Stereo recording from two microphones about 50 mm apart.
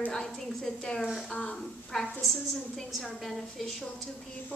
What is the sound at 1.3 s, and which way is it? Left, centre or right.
Speech, left.